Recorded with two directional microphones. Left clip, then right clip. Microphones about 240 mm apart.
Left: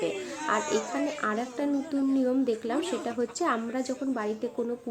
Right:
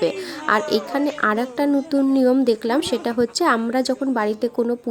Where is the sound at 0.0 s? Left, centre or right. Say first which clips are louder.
Right 9 dB; right.